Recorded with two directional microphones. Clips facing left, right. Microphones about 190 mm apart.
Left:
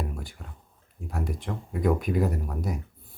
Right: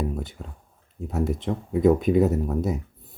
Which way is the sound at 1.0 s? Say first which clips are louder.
Right 7 dB; 25° right (ahead or behind).